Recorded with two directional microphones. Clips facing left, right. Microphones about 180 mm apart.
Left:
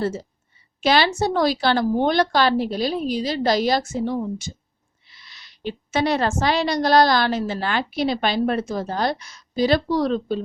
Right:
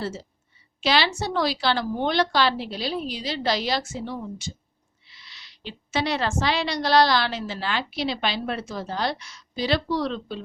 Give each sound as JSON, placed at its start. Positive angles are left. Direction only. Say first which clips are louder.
{"t": 0.0, "sound": "a woman's voice", "louder": "left 6 dB", "side_deg": 50}